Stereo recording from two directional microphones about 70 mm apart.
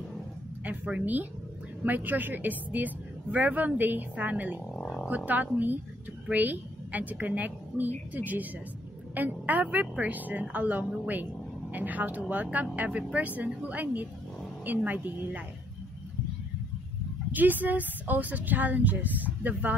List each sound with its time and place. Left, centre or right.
0.7 s a woman's voice: right
17.3 s a woman's voice: right